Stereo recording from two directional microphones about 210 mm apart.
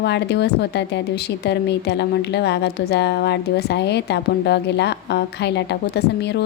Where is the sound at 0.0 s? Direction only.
55° left (ahead or behind).